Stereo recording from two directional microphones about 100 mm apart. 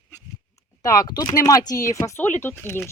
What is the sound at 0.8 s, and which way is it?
Speech, 35° left (ahead or behind).